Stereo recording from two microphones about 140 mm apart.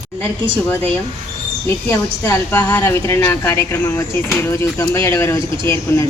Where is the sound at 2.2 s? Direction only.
15° left (ahead or behind).